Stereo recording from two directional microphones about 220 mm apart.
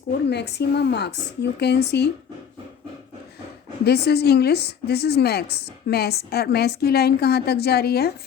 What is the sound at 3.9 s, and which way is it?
A woman's voice, 45° left (ahead or behind).